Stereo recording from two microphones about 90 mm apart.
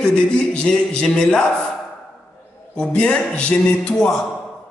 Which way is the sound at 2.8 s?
10° left (ahead or behind).